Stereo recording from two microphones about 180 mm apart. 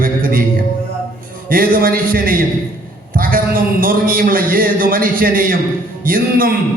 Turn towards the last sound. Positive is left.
turn(degrees=-50)  # may be behind; listen again after turning